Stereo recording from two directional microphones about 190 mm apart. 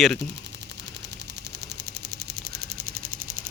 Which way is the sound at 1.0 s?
65° right (ahead or behind).